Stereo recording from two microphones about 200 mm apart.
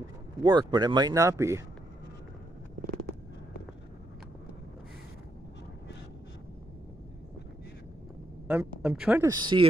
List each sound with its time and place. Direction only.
0.4 s speech: 20° right (ahead or behind)
8.5 s speech: 5° right (ahead or behind)
9.2 s speech: 20° right (ahead or behind)